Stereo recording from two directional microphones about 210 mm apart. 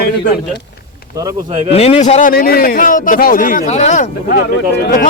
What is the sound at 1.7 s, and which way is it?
A man's voice, 30° left (ahead or behind).